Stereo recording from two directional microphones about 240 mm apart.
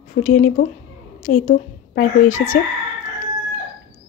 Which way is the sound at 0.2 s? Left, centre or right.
Left.